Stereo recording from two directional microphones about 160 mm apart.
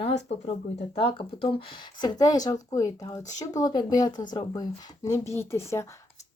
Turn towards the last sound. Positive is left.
turn(degrees=15)  # may be behind; listen again after turning